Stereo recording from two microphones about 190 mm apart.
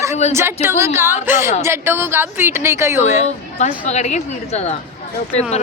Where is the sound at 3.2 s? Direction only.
35° left (ahead or behind).